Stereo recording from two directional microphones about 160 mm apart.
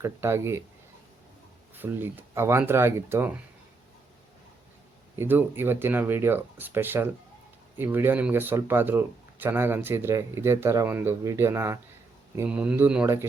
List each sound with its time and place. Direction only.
0.0 s speech: 15° right (ahead or behind)
1.7 s speech: 10° right (ahead or behind)
5.1 s speech: 15° right (ahead or behind)